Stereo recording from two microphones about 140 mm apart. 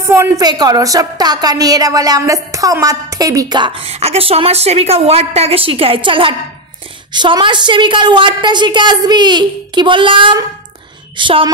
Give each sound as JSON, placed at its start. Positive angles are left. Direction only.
{"t": 0.0, "sound": "a woman's voice", "side_deg": -20}
{"t": 3.8, "sound": "a woman's voice", "side_deg": -45}